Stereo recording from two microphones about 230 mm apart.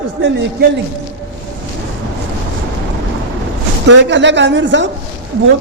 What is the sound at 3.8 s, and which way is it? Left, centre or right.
A woman's voice, right.